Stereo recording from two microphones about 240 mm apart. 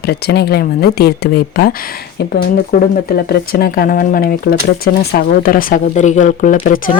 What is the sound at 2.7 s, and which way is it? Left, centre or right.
A woman's voice, left.